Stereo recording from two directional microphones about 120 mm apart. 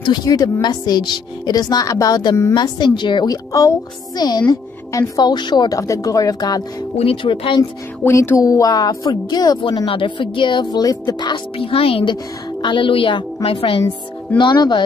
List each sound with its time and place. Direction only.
0.0 s speech: 35° left (ahead or behind)
7.0 s a woman's voice: 50° left (ahead or behind)
8.0 s speech: 20° left (ahead or behind)
11.5 s a woman's voice: 50° left (ahead or behind)
14.4 s speech: 35° left (ahead or behind)